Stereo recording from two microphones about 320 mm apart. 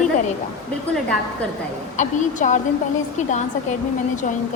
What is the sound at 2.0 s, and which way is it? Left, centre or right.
Speech, left.